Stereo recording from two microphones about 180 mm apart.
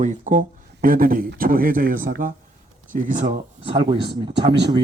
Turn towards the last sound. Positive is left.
turn(degrees=-25)  # may be behind; listen again after turning